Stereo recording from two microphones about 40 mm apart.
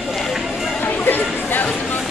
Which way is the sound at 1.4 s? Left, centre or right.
Left.